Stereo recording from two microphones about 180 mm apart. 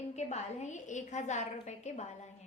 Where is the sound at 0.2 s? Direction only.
40° left (ahead or behind).